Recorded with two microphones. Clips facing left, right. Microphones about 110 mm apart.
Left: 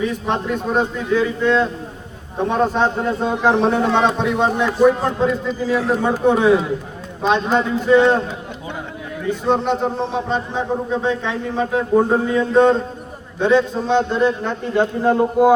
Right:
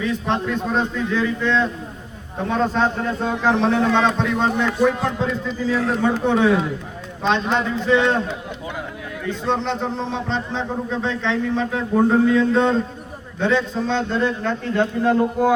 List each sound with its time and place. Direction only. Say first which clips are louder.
0.0 s a man's voice: left 1 dB; 15° left (ahead or behind)